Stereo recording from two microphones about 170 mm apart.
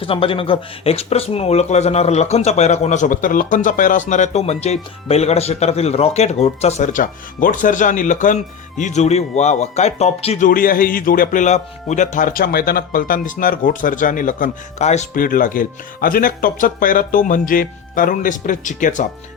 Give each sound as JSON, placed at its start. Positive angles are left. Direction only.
{"t": 0.0, "sound": "speech", "side_deg": 30}